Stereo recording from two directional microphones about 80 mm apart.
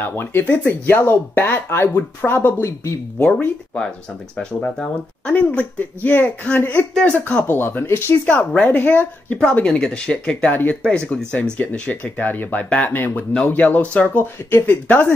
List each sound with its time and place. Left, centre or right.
0.0 s speech: left
3.2 s speech: centre
7.1 s speech: centre
7.4 s speech: left; by 10.5 s centre
10.5 s speech: left
10.8 s speech: centre